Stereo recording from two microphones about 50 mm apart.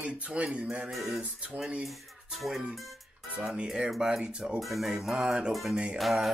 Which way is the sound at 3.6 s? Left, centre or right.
Centre.